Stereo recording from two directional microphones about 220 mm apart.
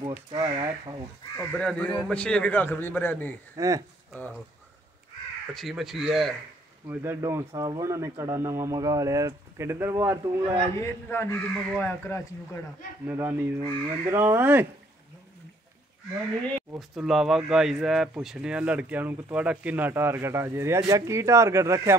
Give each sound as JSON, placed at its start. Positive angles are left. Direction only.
{"t": 0.3, "sound": "speech", "side_deg": -15}
{"t": 1.4, "sound": "a man's voice", "side_deg": 5}
{"t": 3.5, "sound": "speech", "side_deg": -15}
{"t": 5.5, "sound": "a man's voice", "side_deg": 0}
{"t": 10.8, "sound": "speech", "side_deg": 10}
{"t": 13.0, "sound": "speech", "side_deg": -10}
{"t": 16.9, "sound": "speech", "side_deg": 0}